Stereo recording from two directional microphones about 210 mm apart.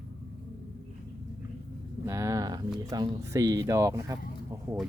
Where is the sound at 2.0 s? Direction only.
15° right (ahead or behind).